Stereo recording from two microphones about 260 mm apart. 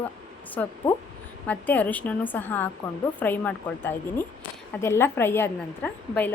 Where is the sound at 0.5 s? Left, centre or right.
Centre.